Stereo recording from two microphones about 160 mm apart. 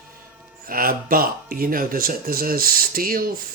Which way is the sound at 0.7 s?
65° right (ahead or behind).